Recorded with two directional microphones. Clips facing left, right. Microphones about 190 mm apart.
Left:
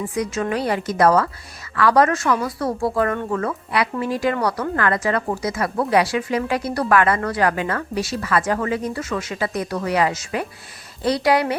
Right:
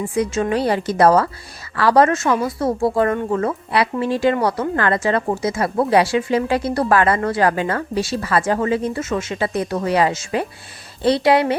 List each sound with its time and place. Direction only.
0.0 s speech: 25° right (ahead or behind)